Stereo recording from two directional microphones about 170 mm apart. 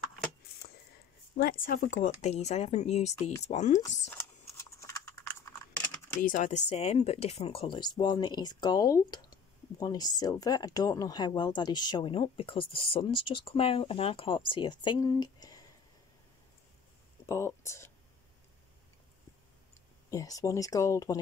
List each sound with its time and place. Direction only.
1.4 s speech: 55° left (ahead or behind)
4.1 s computer keyboard: 15° left (ahead or behind)
6.2 s speech: 50° left (ahead or behind); by 15.6 s 25° left (ahead or behind)
17.3 s speech: 15° left (ahead or behind)
20.1 s speech: 20° left (ahead or behind)